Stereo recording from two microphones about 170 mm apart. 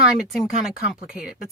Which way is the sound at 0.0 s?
Centre (ahead or behind).